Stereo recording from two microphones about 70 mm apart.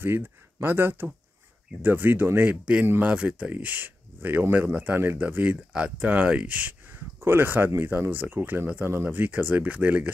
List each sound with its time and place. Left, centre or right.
0.0 s speech: right
2.6 s speech: centre
7.2 s speech: right